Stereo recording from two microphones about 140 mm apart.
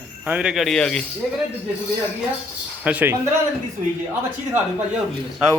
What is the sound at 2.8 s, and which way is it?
Speech, 10° right (ahead or behind).